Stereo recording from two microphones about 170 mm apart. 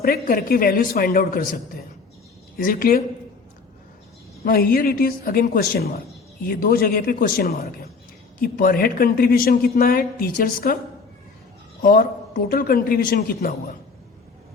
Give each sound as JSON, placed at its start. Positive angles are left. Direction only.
{"t": 0.0, "sound": "speech", "side_deg": 60}
{"t": 2.6, "sound": "speech", "side_deg": 55}
{"t": 4.4, "sound": "speech", "side_deg": 60}
{"t": 11.8, "sound": "speech", "side_deg": 55}